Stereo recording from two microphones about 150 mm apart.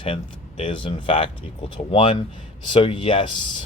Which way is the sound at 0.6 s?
35° left (ahead or behind).